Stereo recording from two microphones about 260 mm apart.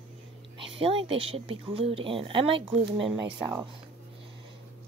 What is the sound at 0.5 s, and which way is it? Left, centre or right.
Speech, centre.